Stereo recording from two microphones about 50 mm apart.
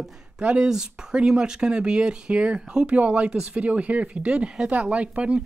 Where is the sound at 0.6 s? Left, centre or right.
Centre.